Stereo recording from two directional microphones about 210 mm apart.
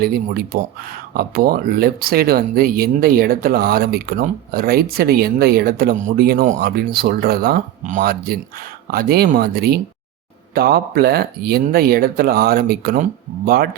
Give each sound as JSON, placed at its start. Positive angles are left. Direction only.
{"t": 0.0, "sound": "speech", "side_deg": -45}